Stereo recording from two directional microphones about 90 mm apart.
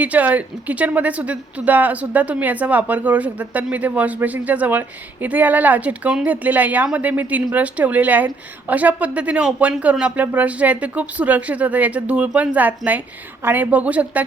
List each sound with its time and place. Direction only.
0.0 s speech: 15° right (ahead or behind)